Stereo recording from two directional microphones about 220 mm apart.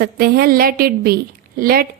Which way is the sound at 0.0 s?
45° right (ahead or behind).